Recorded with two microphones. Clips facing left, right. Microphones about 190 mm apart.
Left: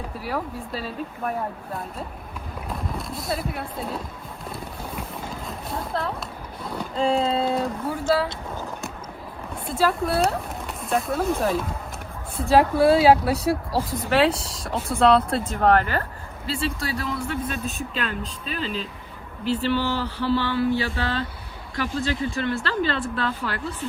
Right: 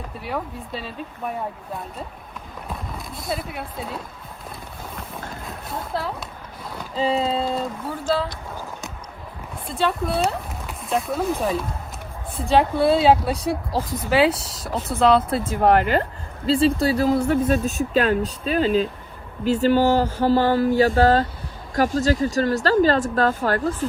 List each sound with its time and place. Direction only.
0.2 s speech: centre (ahead or behind)
3.2 s speech: centre (ahead or behind)
5.5 s speech: centre (ahead or behind)
9.6 s speech: centre (ahead or behind)
15.6 s speech: 15° right (ahead or behind)
16.5 s speech: 30° right (ahead or behind)
17.2 s a sound: 45° right (ahead or behind)
21.8 s speech: 40° right (ahead or behind)